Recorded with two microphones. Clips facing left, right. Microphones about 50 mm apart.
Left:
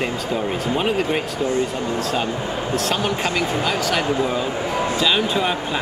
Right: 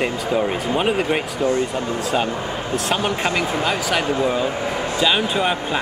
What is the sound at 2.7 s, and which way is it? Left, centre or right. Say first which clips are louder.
Speech: right 1 dB; centre.